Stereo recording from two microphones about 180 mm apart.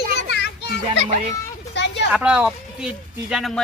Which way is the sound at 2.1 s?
5° right (ahead or behind).